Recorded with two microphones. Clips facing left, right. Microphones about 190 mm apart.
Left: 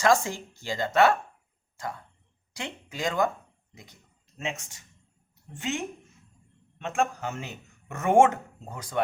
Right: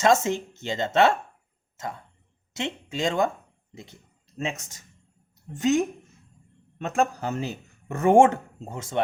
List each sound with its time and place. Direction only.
0.0 s speech: 20° right (ahead or behind)
4.4 s speech: 35° right (ahead or behind)